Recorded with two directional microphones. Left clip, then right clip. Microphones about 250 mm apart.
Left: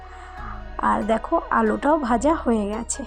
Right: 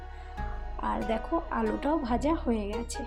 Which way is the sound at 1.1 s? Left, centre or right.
Centre.